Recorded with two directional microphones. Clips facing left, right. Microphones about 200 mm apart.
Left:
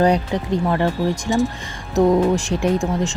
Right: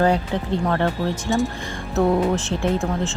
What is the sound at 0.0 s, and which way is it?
Speech, 15° left (ahead or behind).